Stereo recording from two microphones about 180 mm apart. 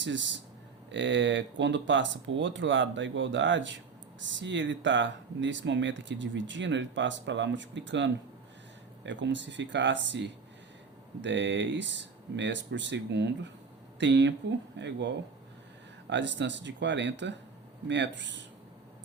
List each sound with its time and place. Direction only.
0.0 s speech: 90° right